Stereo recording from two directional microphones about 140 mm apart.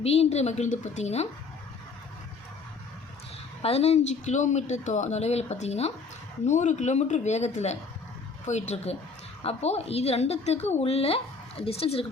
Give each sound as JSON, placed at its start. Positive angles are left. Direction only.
{"t": 0.0, "sound": "a woman's voice", "side_deg": 45}
{"t": 3.6, "sound": "a woman's voice", "side_deg": 50}